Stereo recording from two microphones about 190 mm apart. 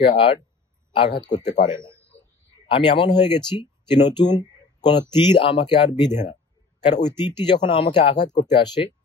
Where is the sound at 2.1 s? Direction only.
35° left (ahead or behind).